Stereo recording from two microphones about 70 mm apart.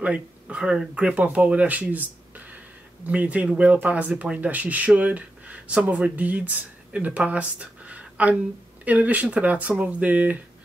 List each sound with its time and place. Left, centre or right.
0.0 s speech: centre